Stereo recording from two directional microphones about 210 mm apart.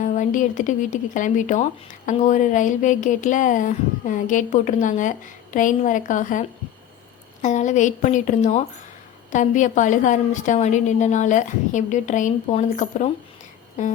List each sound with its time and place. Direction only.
0.1 s speech: 35° left (ahead or behind)